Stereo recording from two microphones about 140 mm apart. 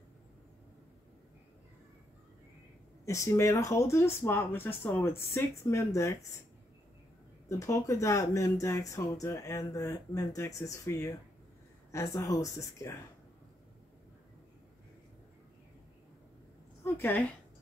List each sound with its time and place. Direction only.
3.1 s speech: 20° left (ahead or behind)
7.4 s speech: 20° left (ahead or behind)
16.8 s a sound: 15° left (ahead or behind)